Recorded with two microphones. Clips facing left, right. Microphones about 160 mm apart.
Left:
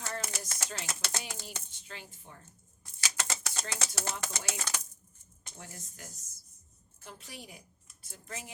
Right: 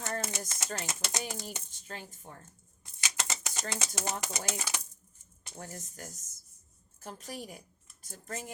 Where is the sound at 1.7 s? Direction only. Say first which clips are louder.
Right 4 dB; 45° right (ahead or behind).